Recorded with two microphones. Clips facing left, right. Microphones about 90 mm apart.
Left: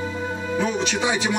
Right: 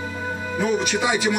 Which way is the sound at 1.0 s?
25° left (ahead or behind).